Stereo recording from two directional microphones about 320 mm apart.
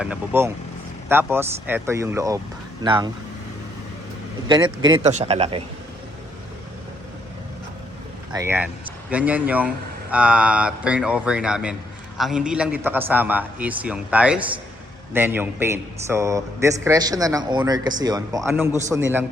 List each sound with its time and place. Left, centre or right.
0.0 s a man's voice: centre
4.4 s a man's voice: centre
8.3 s a man's voice: centre